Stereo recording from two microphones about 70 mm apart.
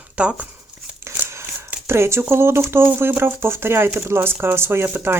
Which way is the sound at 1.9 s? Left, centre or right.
Right.